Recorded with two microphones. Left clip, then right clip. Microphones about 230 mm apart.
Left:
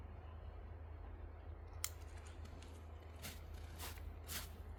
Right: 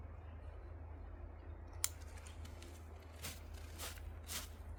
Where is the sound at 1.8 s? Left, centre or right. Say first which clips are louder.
Right 5 dB; right.